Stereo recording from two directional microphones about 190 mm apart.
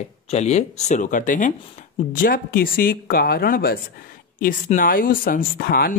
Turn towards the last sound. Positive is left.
turn(degrees=50)  # may be behind; listen again after turning